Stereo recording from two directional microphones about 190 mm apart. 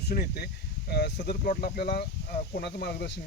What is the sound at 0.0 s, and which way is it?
Speech, 55° left (ahead or behind).